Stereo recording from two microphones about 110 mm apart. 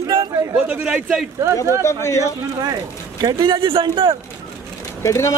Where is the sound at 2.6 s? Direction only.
35° right (ahead or behind); by 4.2 s 55° right (ahead or behind).